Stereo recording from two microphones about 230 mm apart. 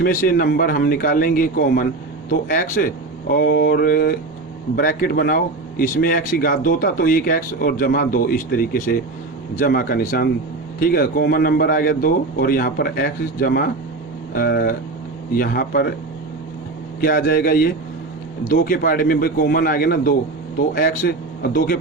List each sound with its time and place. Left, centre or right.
0.0 s speech: left
17.0 s speech: left